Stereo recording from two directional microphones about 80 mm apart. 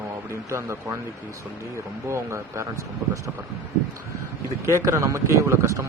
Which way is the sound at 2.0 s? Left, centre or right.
Right.